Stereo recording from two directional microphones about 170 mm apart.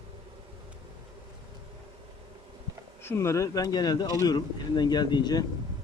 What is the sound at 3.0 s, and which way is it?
Speech, 15° left (ahead or behind).